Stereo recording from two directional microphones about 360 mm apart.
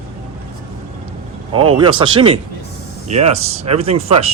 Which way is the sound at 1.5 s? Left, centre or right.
Centre.